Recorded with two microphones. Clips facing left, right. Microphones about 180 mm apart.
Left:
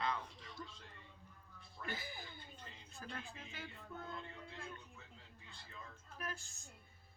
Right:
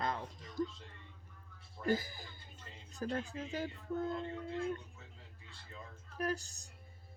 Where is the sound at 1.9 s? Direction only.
40° right (ahead or behind).